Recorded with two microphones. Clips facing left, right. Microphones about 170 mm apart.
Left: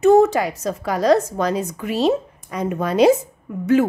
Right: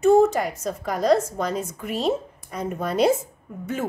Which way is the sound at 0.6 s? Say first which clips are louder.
Left 4 dB; 90° left.